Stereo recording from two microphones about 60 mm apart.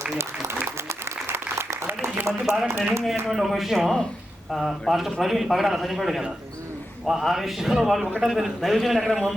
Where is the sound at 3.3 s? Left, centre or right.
Centre.